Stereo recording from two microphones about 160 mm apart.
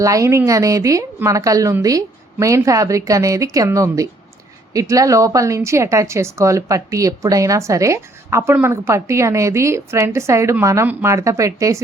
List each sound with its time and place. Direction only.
0.0 s a woman's voice: 20° right (ahead or behind)